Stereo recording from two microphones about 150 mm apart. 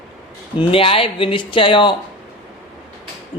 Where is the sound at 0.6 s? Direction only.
40° left (ahead or behind).